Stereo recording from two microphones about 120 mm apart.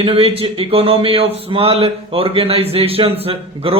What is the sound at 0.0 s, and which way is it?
Speech, 50° right (ahead or behind).